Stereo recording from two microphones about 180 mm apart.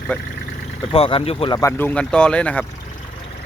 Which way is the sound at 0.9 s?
30° left (ahead or behind).